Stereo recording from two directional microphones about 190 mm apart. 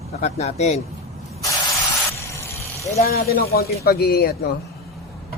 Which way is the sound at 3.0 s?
55° left (ahead or behind).